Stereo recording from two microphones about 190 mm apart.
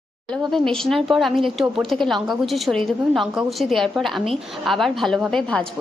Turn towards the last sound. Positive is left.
turn(degrees=5)  # may be behind; listen again after turning